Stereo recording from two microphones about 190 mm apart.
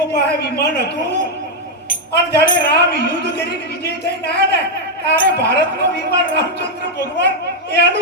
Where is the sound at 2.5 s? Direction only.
55° left (ahead or behind).